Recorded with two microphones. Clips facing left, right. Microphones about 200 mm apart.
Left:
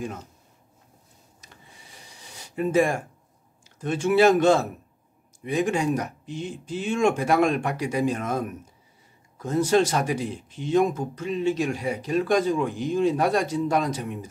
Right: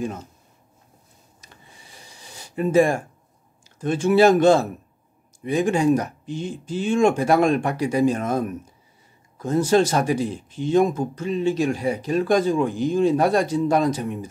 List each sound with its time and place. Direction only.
2.3 s speech: 30° right (ahead or behind)
9.4 s speech: 30° right (ahead or behind)